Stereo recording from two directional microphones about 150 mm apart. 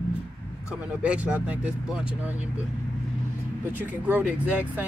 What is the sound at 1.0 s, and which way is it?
Speech, 10° right (ahead or behind).